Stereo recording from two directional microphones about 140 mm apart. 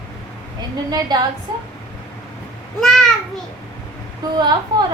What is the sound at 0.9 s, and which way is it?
Speech, 30° right (ahead or behind).